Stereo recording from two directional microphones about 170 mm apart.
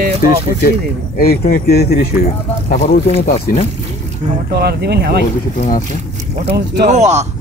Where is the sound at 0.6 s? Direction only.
60° left (ahead or behind).